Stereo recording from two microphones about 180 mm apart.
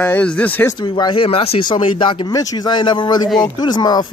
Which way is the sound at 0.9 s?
25° left (ahead or behind).